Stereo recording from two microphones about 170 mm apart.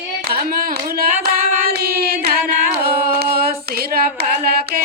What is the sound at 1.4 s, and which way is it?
Singing, 60° right (ahead or behind).